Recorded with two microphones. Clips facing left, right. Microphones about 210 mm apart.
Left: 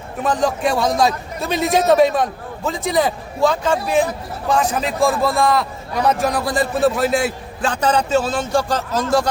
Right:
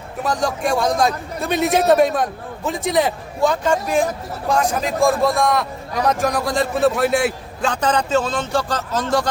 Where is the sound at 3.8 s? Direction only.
45° right (ahead or behind).